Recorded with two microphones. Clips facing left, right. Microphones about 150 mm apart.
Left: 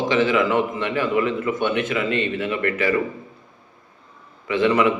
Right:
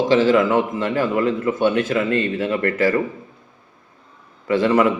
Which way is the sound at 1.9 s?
35° right (ahead or behind).